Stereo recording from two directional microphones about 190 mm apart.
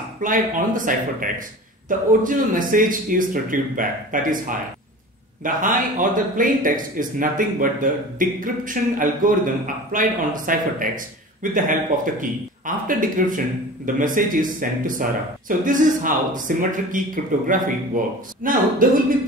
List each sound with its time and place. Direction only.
0.2 s speech: 45° right (ahead or behind)